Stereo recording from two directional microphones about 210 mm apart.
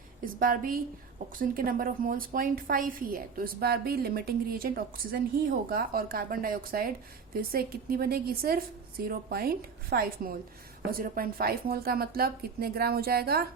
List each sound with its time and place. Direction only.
0.3 s a woman's voice: 40° right (ahead or behind)